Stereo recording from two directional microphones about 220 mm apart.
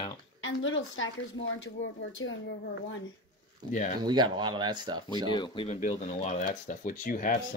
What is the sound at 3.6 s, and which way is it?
Speech, 20° right (ahead or behind).